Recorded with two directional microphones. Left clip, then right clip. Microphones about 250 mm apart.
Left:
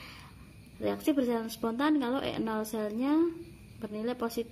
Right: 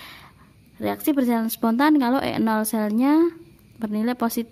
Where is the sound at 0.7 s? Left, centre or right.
Right.